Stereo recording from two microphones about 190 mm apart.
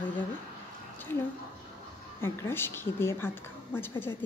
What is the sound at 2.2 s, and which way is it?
Speech, 10° left (ahead or behind).